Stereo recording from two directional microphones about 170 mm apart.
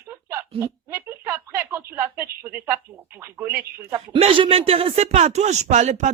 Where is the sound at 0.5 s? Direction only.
15° right (ahead or behind).